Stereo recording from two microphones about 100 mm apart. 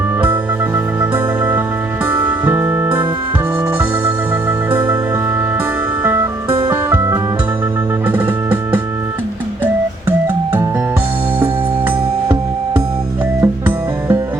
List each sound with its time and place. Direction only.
1.1 s music: 20° right (ahead or behind)
6.0 s music: 20° right (ahead or behind)
10.1 s music: 20° right (ahead or behind)
11.9 s music: 25° right (ahead or behind)